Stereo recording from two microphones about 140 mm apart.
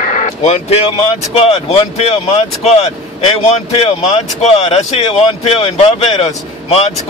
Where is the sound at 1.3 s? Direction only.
45° left (ahead or behind).